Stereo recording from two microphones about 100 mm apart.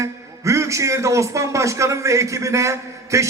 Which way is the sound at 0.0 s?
30° right (ahead or behind).